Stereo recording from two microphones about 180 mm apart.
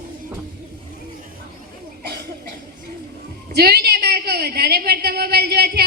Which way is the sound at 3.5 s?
60° right (ahead or behind).